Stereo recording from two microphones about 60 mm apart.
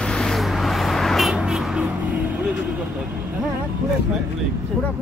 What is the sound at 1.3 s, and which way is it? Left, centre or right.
Music, centre.